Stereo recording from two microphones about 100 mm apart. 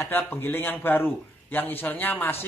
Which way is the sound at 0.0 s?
20° left (ahead or behind).